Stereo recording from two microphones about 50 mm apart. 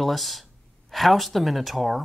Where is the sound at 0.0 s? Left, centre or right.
Centre.